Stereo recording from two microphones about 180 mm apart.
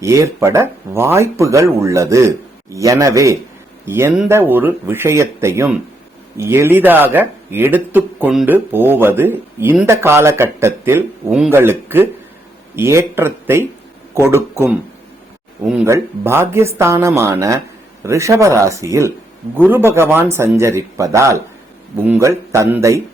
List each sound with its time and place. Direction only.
0.0 s a man's voice: 15° right (ahead or behind)